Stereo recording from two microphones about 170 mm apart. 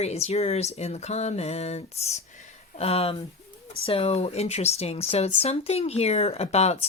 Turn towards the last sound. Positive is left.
turn(degrees=40)  # may be behind; listen again after turning